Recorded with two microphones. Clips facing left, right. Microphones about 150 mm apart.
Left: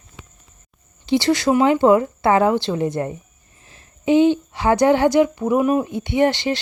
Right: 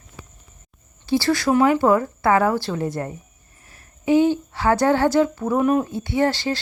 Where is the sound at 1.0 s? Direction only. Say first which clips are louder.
Left 2 dB; 20° left (ahead or behind).